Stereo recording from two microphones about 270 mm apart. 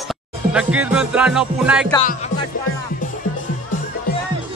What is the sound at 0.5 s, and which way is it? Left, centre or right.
Music, centre.